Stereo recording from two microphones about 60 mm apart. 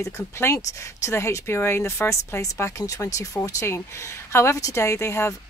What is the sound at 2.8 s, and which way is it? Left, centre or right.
Speech, left.